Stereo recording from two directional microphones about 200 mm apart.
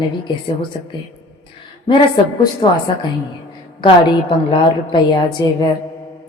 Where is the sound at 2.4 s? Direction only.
25° left (ahead or behind).